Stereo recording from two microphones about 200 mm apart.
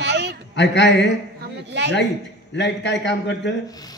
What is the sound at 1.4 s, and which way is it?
Speech, 60° right (ahead or behind).